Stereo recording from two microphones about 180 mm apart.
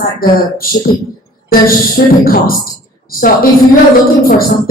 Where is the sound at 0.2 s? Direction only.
55° left (ahead or behind).